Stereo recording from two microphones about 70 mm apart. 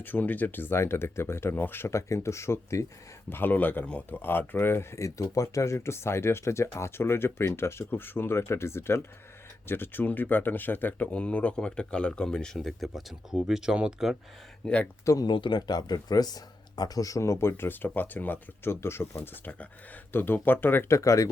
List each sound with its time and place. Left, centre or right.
0.0 s speech: left
3.2 s speech: left; by 12.5 s centre
12.5 s speech: centre
15.0 s speech: left
20.9 s speech: left